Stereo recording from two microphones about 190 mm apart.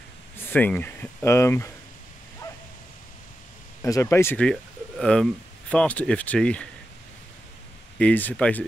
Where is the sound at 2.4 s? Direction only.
20° left (ahead or behind).